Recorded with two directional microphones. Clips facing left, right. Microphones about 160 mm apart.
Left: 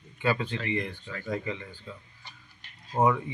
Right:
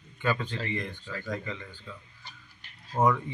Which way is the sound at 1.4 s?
15° left (ahead or behind).